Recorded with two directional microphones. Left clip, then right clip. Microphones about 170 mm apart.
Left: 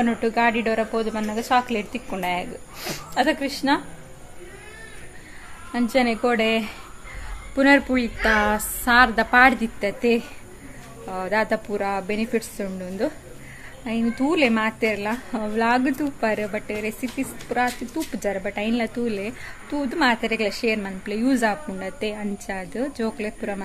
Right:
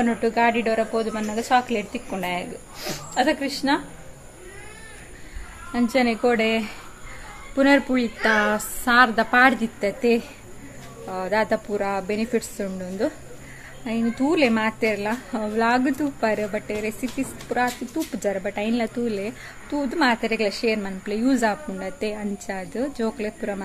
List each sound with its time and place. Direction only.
0.0 s speech: 15° left (ahead or behind)
5.7 s speech: 10° left (ahead or behind)